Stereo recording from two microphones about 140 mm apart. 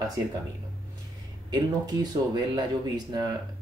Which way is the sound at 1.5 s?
30° right (ahead or behind).